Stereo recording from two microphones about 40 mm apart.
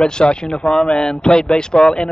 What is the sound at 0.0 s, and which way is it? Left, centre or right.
Speech, left.